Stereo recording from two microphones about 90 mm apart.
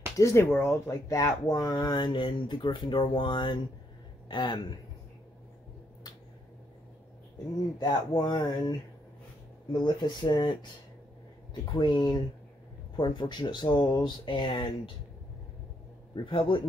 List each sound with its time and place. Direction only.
0.2 s speech: 30° left (ahead or behind); by 4.7 s 55° left (ahead or behind)
7.8 s speech: 50° left (ahead or behind)
11.7 s speech: 55° left (ahead or behind)
14.2 s speech: 65° left (ahead or behind)
16.3 s speech: 75° left (ahead or behind)